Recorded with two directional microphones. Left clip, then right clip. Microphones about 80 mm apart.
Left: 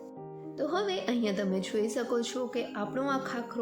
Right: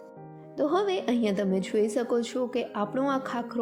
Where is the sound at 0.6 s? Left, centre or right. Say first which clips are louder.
Right 5 dB; right.